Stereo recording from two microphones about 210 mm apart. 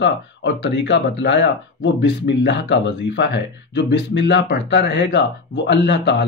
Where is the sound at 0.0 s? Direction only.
55° left (ahead or behind).